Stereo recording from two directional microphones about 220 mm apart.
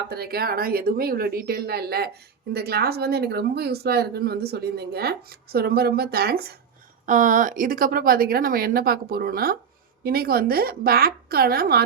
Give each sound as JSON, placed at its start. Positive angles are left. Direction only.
{"t": 0.1, "sound": "speech", "side_deg": -45}